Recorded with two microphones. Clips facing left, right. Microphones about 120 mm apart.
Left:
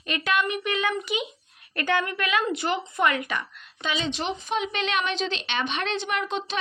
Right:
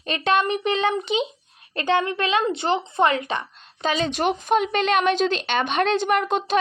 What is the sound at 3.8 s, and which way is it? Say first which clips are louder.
A woman's voice: right 6 dB; 40° right (ahead or behind).